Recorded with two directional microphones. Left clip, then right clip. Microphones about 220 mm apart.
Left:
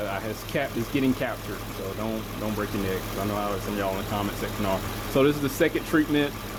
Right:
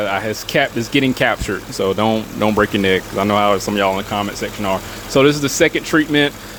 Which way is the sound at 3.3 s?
40° right (ahead or behind).